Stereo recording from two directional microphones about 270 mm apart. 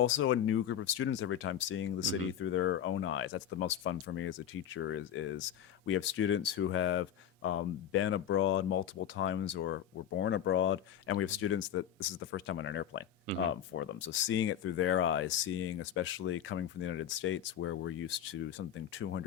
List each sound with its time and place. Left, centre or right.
0.0 s speech: left